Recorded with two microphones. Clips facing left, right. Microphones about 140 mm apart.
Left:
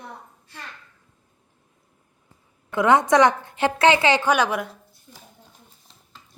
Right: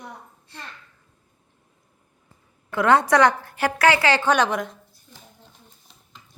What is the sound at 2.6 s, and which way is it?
A woman's voice, 20° left (ahead or behind).